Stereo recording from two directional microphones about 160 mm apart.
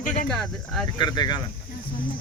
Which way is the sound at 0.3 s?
Centre (ahead or behind).